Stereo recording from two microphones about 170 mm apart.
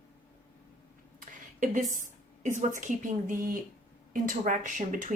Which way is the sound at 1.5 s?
50° right (ahead or behind).